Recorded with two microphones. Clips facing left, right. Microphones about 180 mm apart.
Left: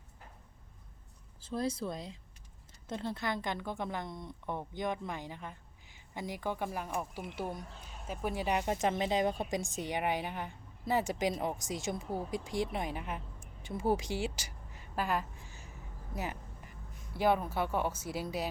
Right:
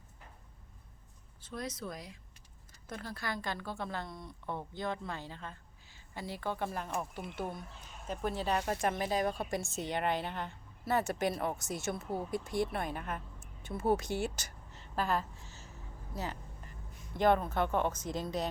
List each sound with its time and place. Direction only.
1.5 s speech: 30° left (ahead or behind); by 13.5 s 10° left (ahead or behind)
13.7 s a sound: 10° left (ahead or behind)
16.1 s vehicle: 15° left (ahead or behind)
17.2 s speech: 10° left (ahead or behind)